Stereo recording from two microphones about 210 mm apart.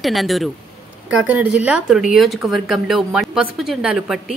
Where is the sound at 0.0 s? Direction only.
Centre (ahead or behind).